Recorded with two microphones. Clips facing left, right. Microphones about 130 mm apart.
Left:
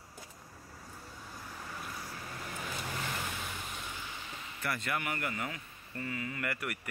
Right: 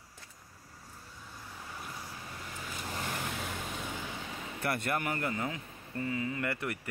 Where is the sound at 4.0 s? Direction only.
60° right (ahead or behind).